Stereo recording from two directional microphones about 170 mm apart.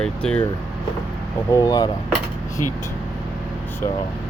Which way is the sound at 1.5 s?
20° left (ahead or behind).